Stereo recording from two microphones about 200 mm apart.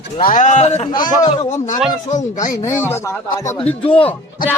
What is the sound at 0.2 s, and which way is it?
Speech, 40° left (ahead or behind).